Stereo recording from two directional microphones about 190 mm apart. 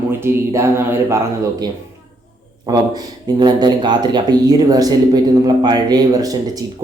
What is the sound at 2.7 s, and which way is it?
Speech, 20° right (ahead or behind).